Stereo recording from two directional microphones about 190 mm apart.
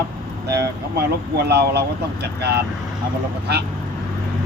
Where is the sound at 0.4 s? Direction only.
60° right (ahead or behind).